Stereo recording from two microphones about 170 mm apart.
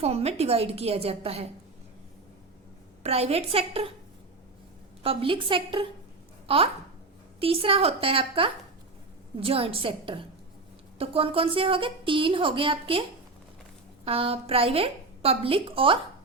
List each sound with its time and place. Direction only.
0.0 s a woman's voice: 35° right (ahead or behind)
3.0 s a woman's voice: 35° right (ahead or behind)
5.0 s a woman's voice: 30° right (ahead or behind)